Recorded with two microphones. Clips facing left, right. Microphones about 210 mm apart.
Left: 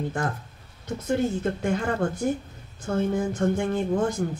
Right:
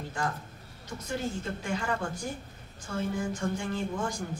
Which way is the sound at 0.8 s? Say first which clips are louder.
Left 9 dB; 55° left (ahead or behind).